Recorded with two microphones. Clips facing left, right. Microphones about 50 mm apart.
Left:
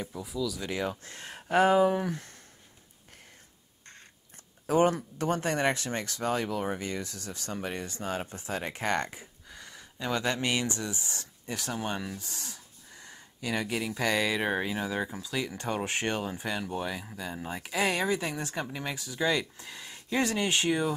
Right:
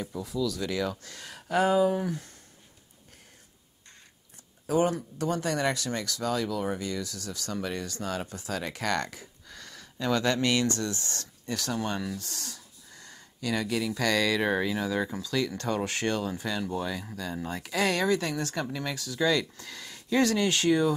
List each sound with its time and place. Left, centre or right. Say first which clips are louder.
0.1 s speech: right 5 dB; centre
0.6 s speech: right 2 dB; left
4.6 s speech: left 1 dB; left